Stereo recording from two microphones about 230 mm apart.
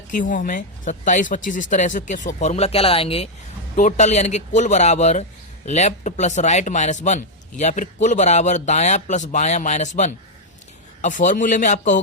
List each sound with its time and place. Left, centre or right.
0.1 s a man's voice: left